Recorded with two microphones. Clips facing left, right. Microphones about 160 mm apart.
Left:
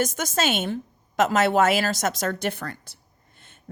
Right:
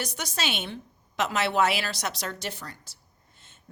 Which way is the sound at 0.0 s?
45° left (ahead or behind).